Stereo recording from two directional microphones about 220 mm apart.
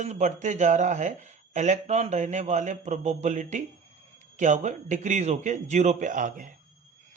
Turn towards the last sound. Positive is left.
turn(degrees=-35)  # may be behind; listen again after turning